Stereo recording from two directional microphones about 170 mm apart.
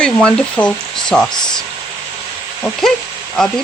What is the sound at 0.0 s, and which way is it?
Speech, 5° left (ahead or behind).